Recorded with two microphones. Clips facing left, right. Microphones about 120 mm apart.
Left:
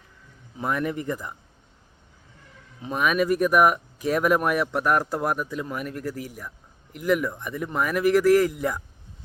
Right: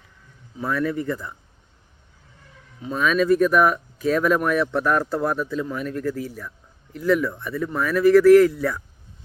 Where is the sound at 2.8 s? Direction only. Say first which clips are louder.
Right 2 dB; 15° left (ahead or behind).